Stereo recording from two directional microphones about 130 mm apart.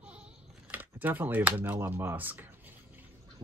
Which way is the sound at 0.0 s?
10° right (ahead or behind).